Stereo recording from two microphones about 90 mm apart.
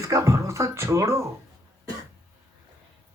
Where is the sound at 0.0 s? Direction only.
35° right (ahead or behind).